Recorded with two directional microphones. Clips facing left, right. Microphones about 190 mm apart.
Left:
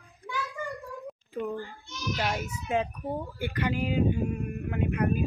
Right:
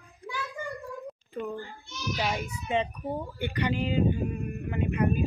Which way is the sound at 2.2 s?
5° left (ahead or behind).